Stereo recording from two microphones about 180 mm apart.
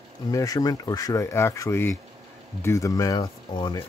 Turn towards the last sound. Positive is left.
turn(degrees=25)  # may be behind; listen again after turning